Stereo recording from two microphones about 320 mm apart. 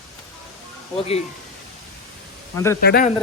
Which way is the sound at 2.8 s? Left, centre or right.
Left.